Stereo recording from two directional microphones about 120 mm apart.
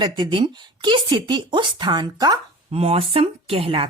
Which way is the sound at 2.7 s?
55° right (ahead or behind).